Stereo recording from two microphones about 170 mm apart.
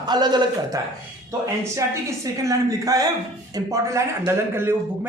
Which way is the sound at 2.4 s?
20° right (ahead or behind).